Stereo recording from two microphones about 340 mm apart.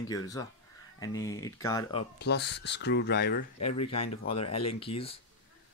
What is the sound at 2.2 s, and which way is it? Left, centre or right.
Speech, left.